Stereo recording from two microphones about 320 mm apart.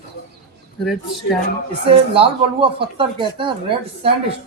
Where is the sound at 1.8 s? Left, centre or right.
Centre.